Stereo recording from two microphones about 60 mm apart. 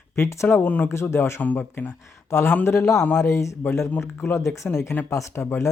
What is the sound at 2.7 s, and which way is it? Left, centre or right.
Speech, left.